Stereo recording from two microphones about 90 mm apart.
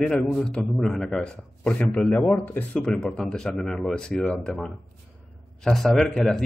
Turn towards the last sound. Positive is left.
turn(degrees=10)  # may be behind; listen again after turning